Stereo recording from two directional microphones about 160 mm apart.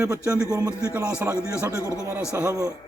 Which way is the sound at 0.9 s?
10° right (ahead or behind).